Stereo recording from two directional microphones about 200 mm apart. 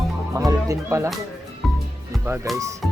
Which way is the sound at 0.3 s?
15° right (ahead or behind).